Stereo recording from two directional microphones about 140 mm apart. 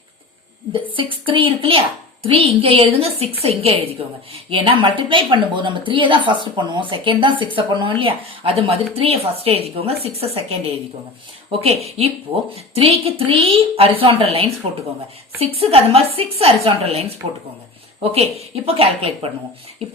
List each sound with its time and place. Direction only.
1.1 s a woman's voice: 40° right (ahead or behind)
11.6 s a woman's voice: 45° right (ahead or behind)